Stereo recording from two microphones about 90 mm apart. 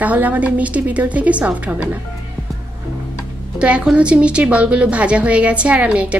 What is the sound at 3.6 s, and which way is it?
Speech, 10° right (ahead or behind).